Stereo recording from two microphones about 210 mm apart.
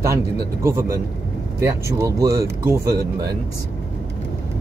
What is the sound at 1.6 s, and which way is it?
Speech, 15° right (ahead or behind).